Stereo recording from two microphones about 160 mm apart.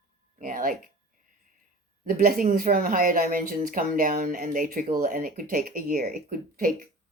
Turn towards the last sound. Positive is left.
turn(degrees=-60)  # may be behind; listen again after turning